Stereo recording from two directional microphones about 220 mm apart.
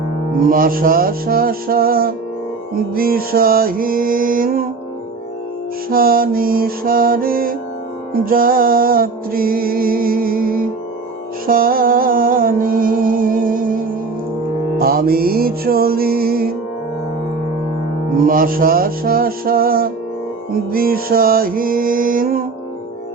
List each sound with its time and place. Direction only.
0.4 s music: 40° right (ahead or behind)
5.9 s music: 40° right (ahead or behind)
18.3 s music: 40° right (ahead or behind)